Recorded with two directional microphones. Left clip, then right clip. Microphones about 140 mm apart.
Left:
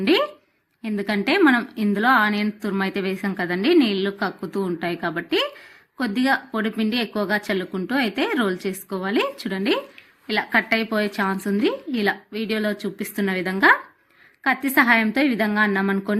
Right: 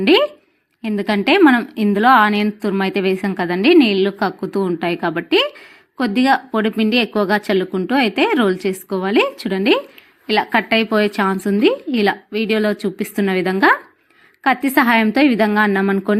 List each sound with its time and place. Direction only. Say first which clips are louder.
0.0 s a woman's voice: right 6 dB; 30° right (ahead or behind)